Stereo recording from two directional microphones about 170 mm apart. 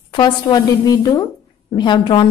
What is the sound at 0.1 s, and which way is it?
Speech, 25° left (ahead or behind).